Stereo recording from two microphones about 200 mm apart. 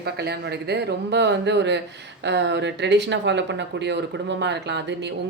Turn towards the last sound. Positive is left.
turn(degrees=-60)  # may be behind; listen again after turning